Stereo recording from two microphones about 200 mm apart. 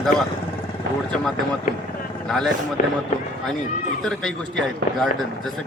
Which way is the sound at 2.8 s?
40° left (ahead or behind).